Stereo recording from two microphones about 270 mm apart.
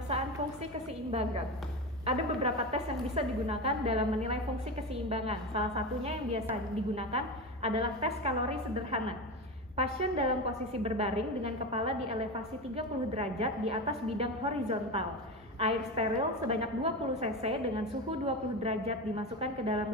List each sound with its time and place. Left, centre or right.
2.0 s a woman's voice: right